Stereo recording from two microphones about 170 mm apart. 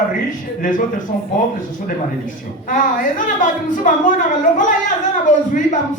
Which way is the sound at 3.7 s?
50° left (ahead or behind).